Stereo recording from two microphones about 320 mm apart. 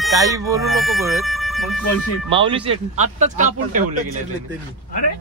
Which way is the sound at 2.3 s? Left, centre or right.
Centre.